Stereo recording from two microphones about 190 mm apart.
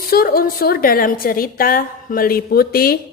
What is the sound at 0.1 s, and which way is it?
A woman's voice, 50° left (ahead or behind).